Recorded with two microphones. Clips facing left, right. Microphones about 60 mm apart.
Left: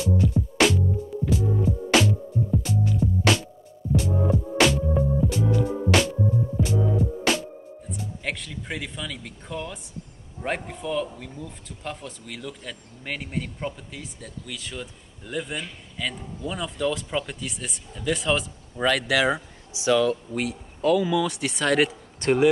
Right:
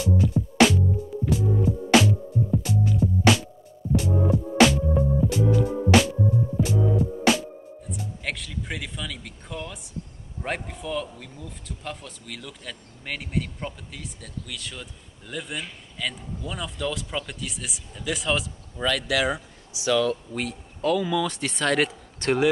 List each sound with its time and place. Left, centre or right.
0.2 s music: centre
10.4 s speech: centre
18.8 s speech: left
20.3 s speech: centre